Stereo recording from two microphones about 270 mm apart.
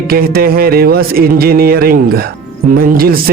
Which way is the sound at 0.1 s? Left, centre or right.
Right.